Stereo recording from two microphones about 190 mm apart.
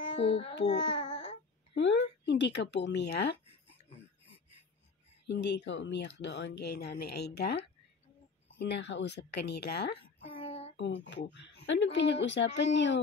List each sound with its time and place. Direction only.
0.1 s child singing: 30° left (ahead or behind)
0.7 s babbling: 30° left (ahead or behind)
1.8 s speech: 70° left (ahead or behind)
5.2 s speech: 65° left (ahead or behind)
10.2 s a sound: 30° left (ahead or behind)
10.8 s speech: 70° left (ahead or behind)